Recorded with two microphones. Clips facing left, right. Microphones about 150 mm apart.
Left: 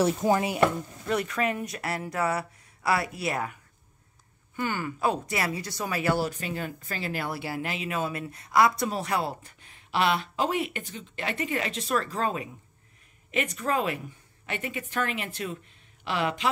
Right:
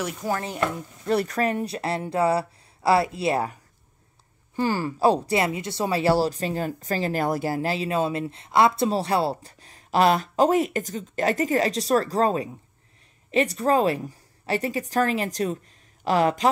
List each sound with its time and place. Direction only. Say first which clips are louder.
0.0 s speech: left 6 dB; 30° left (ahead or behind)
0.3 s speech: left 3 dB; 15° left (ahead or behind)
1.0 s speech: right 5 dB; 35° right (ahead or behind)
4.6 s speech: right 6 dB; 35° right (ahead or behind)